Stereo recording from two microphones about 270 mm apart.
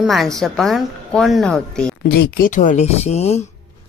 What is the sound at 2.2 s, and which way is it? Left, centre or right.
Speech, left.